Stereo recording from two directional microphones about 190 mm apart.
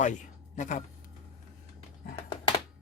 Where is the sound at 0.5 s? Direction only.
40° left (ahead or behind).